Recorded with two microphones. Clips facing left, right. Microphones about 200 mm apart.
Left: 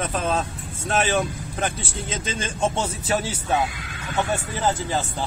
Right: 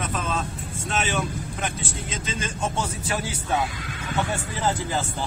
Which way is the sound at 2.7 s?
25° left (ahead or behind).